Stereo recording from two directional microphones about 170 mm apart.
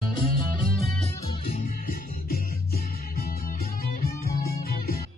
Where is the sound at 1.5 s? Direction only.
60° left (ahead or behind).